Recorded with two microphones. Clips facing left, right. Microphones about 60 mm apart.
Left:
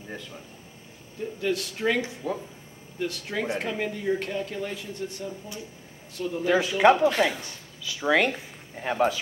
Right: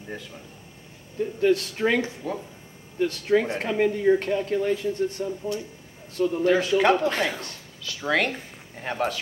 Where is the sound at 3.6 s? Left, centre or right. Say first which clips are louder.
Right 6 dB; right.